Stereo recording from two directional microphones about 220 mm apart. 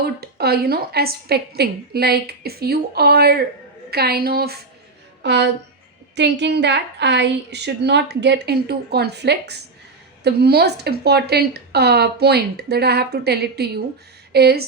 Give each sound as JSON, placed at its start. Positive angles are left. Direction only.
{"t": 0.0, "sound": "a woman's voice", "side_deg": -45}